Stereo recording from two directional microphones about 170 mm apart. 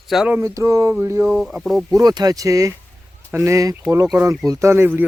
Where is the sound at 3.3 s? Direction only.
15° right (ahead or behind).